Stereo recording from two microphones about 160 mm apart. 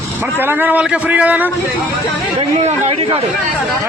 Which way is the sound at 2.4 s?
40° right (ahead or behind).